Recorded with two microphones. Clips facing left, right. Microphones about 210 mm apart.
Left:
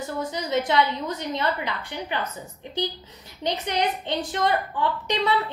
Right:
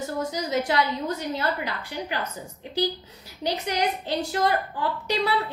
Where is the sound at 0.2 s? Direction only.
10° right (ahead or behind).